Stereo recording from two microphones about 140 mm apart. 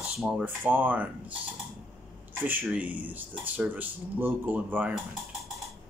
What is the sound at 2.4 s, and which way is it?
Speech, 10° right (ahead or behind).